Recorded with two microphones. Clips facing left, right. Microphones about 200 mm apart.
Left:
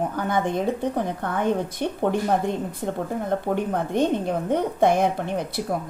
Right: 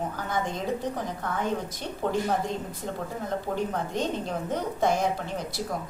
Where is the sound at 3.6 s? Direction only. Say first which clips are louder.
Left 6 dB; 60° left (ahead or behind).